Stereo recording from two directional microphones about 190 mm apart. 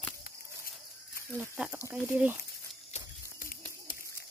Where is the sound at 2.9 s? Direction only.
45° left (ahead or behind).